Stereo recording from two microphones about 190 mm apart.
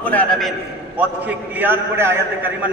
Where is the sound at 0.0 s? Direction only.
10° left (ahead or behind).